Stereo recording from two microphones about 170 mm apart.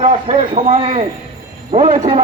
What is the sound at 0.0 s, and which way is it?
Speech, 40° right (ahead or behind).